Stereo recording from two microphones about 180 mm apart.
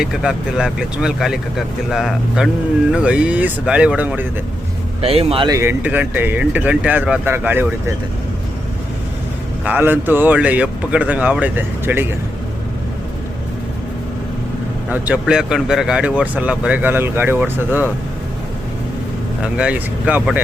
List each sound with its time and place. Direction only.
0.0 s speech: 5° right (ahead or behind)
4.9 s speech: 35° right (ahead or behind)
5.5 s speech: 15° right (ahead or behind)
9.6 s speech: 10° right (ahead or behind)
14.8 s speech: 10° right (ahead or behind)
19.4 s speech: 5° right (ahead or behind)